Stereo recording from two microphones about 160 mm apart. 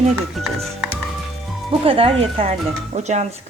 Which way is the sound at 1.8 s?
35° right (ahead or behind).